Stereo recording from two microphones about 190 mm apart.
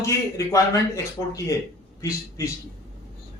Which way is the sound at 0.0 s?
15° left (ahead or behind).